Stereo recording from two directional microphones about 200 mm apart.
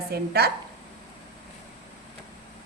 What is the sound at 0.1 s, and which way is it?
Speech, 50° right (ahead or behind).